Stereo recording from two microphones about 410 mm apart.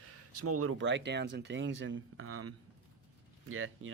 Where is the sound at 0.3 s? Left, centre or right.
Right.